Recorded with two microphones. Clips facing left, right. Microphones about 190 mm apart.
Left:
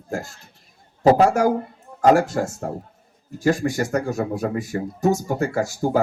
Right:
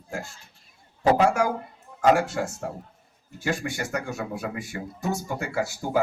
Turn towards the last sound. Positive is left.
turn(degrees=40)  # may be behind; listen again after turning